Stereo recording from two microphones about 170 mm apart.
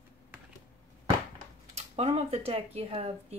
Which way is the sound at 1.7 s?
35° right (ahead or behind).